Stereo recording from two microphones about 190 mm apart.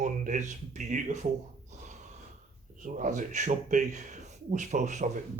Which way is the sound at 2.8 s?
40° right (ahead or behind).